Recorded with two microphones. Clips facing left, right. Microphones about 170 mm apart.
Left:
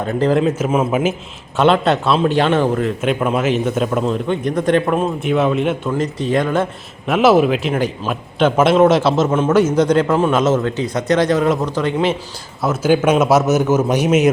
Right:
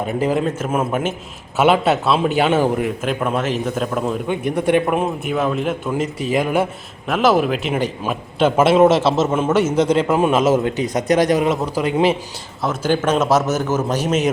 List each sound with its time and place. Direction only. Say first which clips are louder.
0.0 s a man's voice: left 3 dB; 10° right (ahead or behind)
0.4 s a man's voice: left 4 dB; 5° left (ahead or behind)
1.5 s a man's voice: left 1 dB; 5° right (ahead or behind)
3.0 s a man's voice: left 3 dB; centre (ahead or behind)
4.0 s a man's voice: left 2 dB; 10° right (ahead or behind)
5.2 s a man's voice: left 4 dB; centre (ahead or behind)
7.1 s a man's voice: left 4 dB; 5° left (ahead or behind); by 11.4 s 15° right (ahead or behind)
11.4 s a man's voice: left 2 dB; 5° right (ahead or behind)
12.6 s a man's voice: left 4 dB; 5° left (ahead or behind)